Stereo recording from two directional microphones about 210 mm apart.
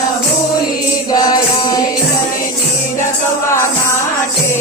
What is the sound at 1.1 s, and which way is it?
Music, 20° left (ahead or behind).